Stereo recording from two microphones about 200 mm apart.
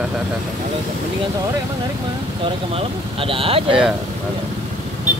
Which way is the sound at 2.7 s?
25° right (ahead or behind).